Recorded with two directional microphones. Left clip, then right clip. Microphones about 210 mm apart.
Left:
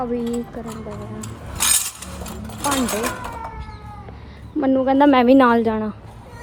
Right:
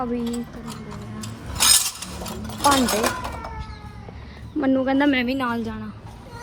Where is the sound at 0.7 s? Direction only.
Centre (ahead or behind).